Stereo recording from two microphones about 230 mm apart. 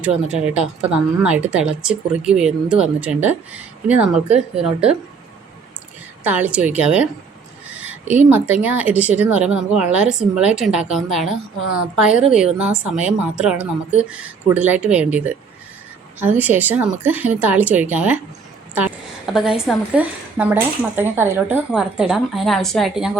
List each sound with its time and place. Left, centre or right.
0.0 s a woman's voice: centre
6.2 s a woman's voice: centre
7.7 s a sound: centre
8.6 s a woman's voice: centre